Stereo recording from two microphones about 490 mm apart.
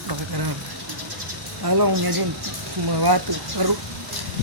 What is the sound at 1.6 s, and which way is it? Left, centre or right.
Speech, right.